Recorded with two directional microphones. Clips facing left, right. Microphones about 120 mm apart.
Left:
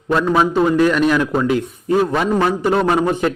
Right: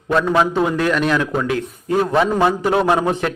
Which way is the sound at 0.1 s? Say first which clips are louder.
Left 1 dB; 5° left (ahead or behind).